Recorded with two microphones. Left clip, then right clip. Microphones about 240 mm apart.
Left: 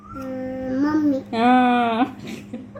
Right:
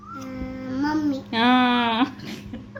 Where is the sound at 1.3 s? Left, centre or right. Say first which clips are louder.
Left 2 dB; right.